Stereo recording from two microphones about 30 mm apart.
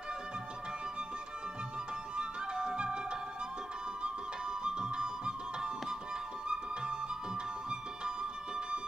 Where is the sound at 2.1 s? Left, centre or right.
Right.